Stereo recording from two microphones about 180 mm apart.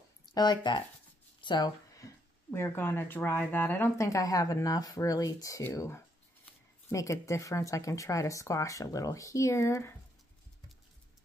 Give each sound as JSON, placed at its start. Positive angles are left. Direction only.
{"t": 0.3, "sound": "speech", "side_deg": 25}